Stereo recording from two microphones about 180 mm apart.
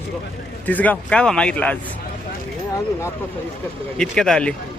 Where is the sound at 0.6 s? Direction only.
10° left (ahead or behind).